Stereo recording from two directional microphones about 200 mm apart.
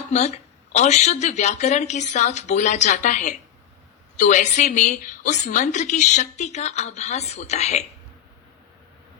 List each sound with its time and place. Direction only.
0.1 s a woman's voice: 35° left (ahead or behind)